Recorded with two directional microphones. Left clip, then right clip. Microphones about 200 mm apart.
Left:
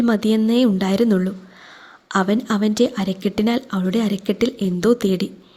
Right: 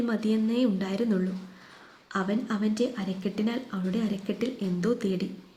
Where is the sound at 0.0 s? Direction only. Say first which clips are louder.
Left 10 dB; 45° left (ahead or behind).